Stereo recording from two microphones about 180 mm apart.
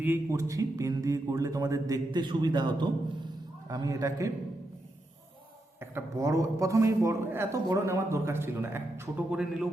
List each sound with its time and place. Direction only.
0.0 s speech: 15° right (ahead or behind)
5.8 s speech: 15° right (ahead or behind)